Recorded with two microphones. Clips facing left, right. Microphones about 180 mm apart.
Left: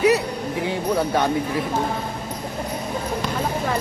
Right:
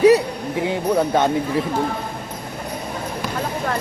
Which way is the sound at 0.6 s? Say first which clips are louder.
Right 3 dB; 20° right (ahead or behind).